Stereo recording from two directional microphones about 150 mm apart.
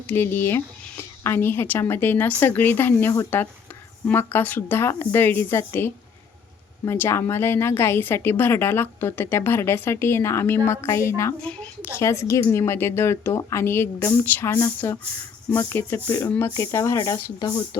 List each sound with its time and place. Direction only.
0.1 s a woman's voice: 15° left (ahead or behind)
11.3 s a woman's voice: 5° left (ahead or behind); by 17.5 s 20° left (ahead or behind)